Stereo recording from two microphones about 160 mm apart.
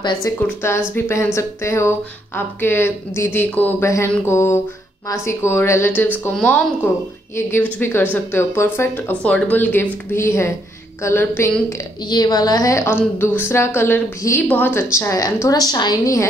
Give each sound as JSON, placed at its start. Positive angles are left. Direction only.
{"t": 0.0, "sound": "a woman's voice", "side_deg": 20}